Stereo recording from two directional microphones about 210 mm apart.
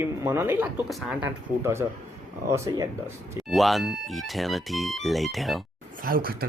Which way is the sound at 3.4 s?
Centre (ahead or behind).